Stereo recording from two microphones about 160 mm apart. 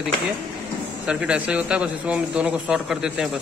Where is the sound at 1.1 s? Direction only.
5° right (ahead or behind).